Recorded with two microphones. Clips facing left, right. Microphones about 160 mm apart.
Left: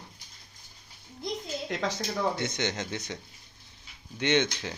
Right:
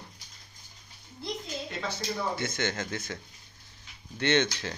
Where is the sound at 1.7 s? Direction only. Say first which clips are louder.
Left 6 dB; 90° left.